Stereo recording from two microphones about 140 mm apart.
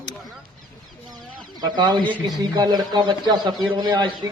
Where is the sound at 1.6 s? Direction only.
30° right (ahead or behind).